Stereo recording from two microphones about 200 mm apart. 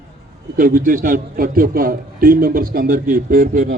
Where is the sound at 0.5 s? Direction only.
45° right (ahead or behind).